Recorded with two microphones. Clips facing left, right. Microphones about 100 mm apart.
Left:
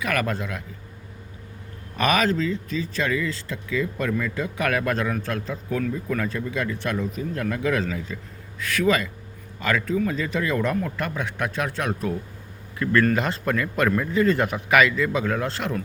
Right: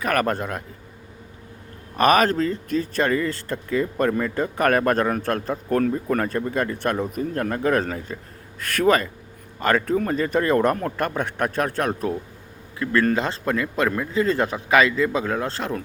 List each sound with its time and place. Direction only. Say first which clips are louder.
0.0 s speech: right 4 dB; 45° right (ahead or behind)
2.0 s speech: right 4 dB; 45° right (ahead or behind)
12.8 s a man's voice: even; 25° right (ahead or behind)